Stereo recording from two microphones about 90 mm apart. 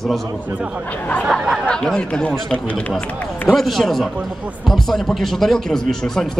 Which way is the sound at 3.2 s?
20° left (ahead or behind).